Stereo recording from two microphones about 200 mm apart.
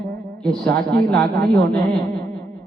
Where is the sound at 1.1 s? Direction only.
50° right (ahead or behind).